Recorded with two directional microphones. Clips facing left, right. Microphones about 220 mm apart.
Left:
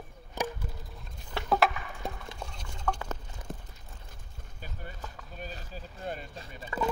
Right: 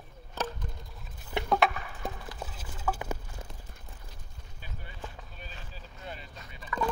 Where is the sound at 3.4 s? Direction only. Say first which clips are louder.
Left 6 dB; 25° right (ahead or behind).